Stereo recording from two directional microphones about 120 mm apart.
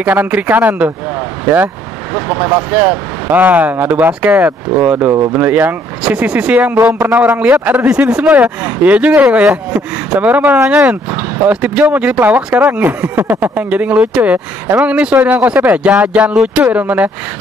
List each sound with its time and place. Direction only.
0.0 s speech: 15° right (ahead or behind)
5.1 s speech: 25° right (ahead or behind)
5.4 s speech: 15° right (ahead or behind)